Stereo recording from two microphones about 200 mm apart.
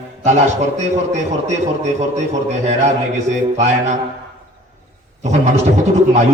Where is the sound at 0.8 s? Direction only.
35° right (ahead or behind).